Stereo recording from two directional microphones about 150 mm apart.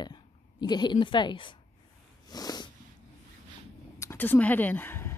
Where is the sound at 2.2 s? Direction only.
25° left (ahead or behind).